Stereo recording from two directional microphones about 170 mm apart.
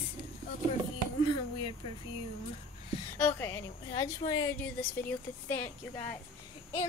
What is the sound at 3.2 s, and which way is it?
Speech, 10° left (ahead or behind).